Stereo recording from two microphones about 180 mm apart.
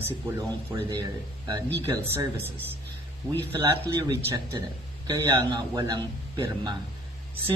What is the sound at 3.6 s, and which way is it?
Speech, 25° right (ahead or behind).